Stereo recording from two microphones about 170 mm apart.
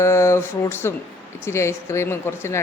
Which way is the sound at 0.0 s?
15° left (ahead or behind).